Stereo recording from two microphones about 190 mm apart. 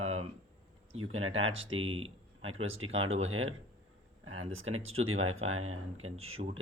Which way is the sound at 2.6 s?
90° right.